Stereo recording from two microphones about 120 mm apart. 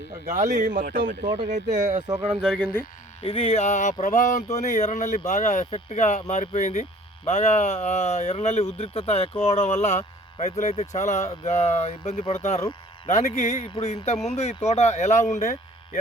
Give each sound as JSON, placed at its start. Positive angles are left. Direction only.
{"t": 0.5, "sound": "speech", "side_deg": -90}
{"t": 2.3, "sound": "speech", "side_deg": 0}
{"t": 3.2, "sound": "speech", "side_deg": 55}
{"t": 4.0, "sound": "speech", "side_deg": 90}
{"t": 5.3, "sound": "speech", "side_deg": 75}
{"t": 13.1, "sound": "speech", "side_deg": 75}